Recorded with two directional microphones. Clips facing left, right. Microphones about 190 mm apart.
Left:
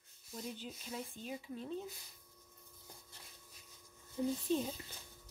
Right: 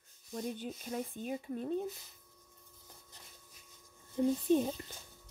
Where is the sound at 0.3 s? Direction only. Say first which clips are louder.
Right 6 dB; 45° right (ahead or behind).